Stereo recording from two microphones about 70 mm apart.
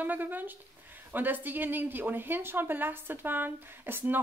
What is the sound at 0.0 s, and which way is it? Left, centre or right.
A woman's voice, right.